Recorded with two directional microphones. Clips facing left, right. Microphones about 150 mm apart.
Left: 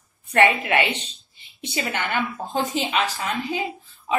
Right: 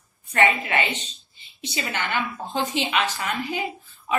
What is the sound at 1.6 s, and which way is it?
A woman's voice, 50° left (ahead or behind).